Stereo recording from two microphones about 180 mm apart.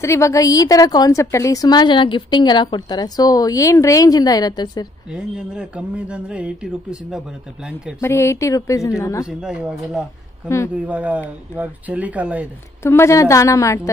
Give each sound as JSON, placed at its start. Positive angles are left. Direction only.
{"t": 0.0, "sound": "a woman's voice", "side_deg": 15}
{"t": 5.1, "sound": "speech", "side_deg": -5}
{"t": 8.0, "sound": "a woman's voice", "side_deg": 15}
{"t": 9.2, "sound": "speech", "side_deg": -5}
{"t": 12.8, "sound": "a woman's voice", "side_deg": 15}